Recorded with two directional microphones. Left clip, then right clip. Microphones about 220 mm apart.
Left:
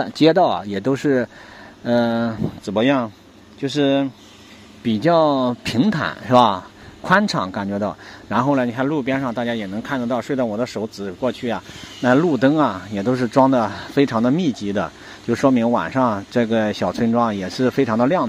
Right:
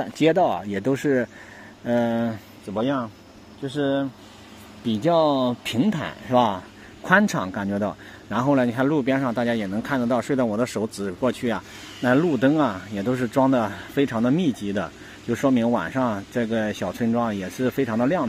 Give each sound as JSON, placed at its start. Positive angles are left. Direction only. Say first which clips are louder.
{"t": 0.0, "sound": "speech", "louder": "left 5 dB", "side_deg": 10}
{"t": 2.7, "sound": "speech", "louder": "left 7 dB", "side_deg": 25}
{"t": 4.8, "sound": "speech", "louder": "left 4 dB", "side_deg": 10}
{"t": 7.1, "sound": "speech", "louder": "left 2 dB", "side_deg": 0}